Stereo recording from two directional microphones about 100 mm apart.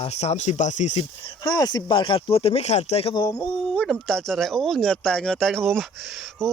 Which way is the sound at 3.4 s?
15° left (ahead or behind).